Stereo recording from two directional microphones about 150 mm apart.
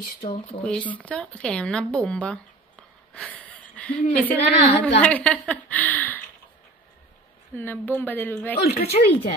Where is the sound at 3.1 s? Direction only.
10° left (ahead or behind).